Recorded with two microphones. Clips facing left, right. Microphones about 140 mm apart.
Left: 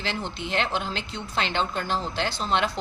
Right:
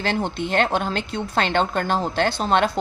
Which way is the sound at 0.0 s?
50° right (ahead or behind).